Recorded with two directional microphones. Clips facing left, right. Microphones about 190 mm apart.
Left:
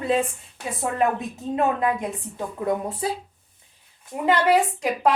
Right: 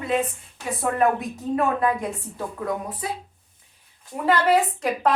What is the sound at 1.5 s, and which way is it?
A woman's voice, 20° left (ahead or behind).